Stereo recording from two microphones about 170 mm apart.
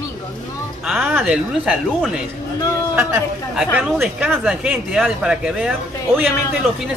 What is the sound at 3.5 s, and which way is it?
Speech, centre (ahead or behind).